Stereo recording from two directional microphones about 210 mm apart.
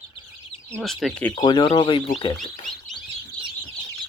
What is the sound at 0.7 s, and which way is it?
Speech, centre (ahead or behind).